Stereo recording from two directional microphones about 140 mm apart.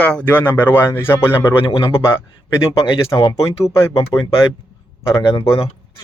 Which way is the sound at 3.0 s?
25° left (ahead or behind).